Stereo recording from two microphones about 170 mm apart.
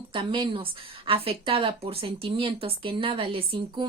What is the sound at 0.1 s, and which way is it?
Speech, 30° right (ahead or behind).